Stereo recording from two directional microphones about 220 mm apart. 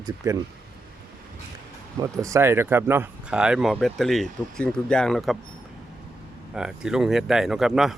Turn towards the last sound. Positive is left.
turn(degrees=0)  # may be behind; listen again after turning